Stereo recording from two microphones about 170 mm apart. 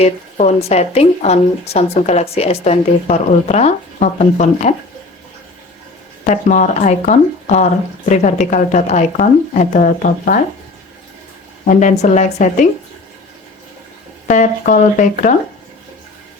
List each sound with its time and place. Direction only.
0.0 s speech: 40° left (ahead or behind)
6.2 s speech: 45° left (ahead or behind)
11.7 s speech: 45° left (ahead or behind)
14.3 s speech: 45° left (ahead or behind)